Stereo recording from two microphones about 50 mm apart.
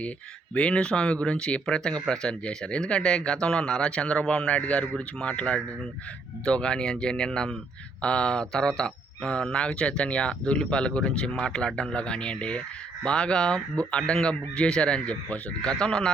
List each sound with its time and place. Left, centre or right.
0.5 s speech: left